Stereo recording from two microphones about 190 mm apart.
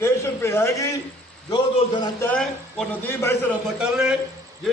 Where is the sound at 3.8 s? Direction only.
5° right (ahead or behind).